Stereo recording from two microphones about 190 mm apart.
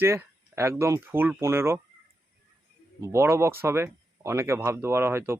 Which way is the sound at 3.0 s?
15° right (ahead or behind).